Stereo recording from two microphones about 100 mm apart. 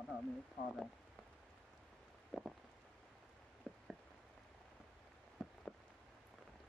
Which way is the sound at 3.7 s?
5° left (ahead or behind).